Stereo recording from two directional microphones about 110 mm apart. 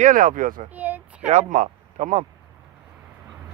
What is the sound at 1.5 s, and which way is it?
Speech, 90° right.